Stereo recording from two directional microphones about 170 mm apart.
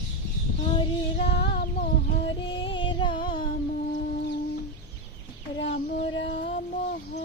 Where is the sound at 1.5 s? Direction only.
65° left (ahead or behind).